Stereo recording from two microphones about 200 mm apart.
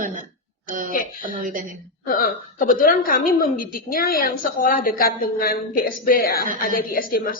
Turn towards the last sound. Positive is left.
turn(degrees=45)  # may be behind; listen again after turning